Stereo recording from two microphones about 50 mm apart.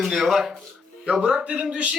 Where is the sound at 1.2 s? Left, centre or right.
Centre.